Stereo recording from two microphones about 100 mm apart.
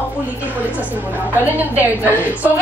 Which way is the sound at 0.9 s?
20° right (ahead or behind).